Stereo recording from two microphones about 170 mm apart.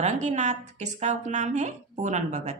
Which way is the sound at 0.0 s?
40° right (ahead or behind).